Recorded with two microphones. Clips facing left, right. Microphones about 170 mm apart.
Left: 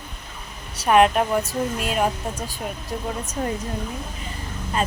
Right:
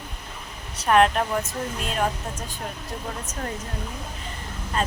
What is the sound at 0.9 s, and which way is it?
Speech, 10° left (ahead or behind).